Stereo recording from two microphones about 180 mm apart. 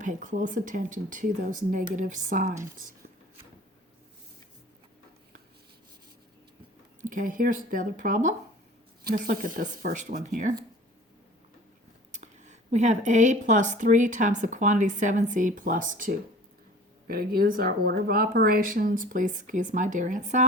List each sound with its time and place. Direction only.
0.0 s speech: 45° right (ahead or behind)
7.0 s speech: 45° right (ahead or behind)
12.1 s speech: 40° right (ahead or behind)